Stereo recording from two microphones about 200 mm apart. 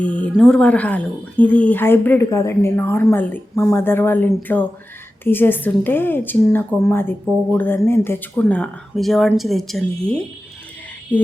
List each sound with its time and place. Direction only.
0.0 s a woman's voice: 5° left (ahead or behind)